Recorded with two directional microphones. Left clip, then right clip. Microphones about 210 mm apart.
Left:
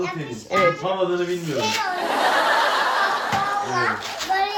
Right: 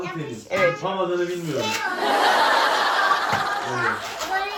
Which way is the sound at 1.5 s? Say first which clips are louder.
Left 3 dB; centre (ahead or behind).